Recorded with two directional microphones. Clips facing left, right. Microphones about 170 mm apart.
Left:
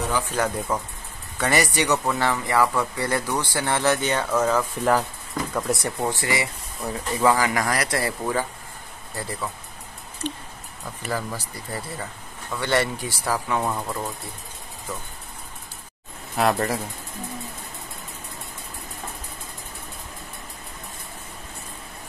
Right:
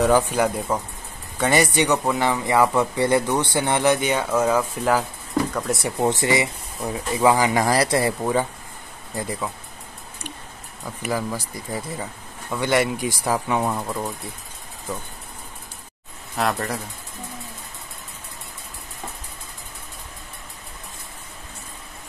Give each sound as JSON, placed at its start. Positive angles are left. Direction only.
{"t": 0.3, "sound": "speech", "side_deg": -10}
{"t": 5.9, "sound": "speech", "side_deg": -20}
{"t": 11.0, "sound": "speech", "side_deg": -10}
{"t": 16.3, "sound": "speech", "side_deg": 0}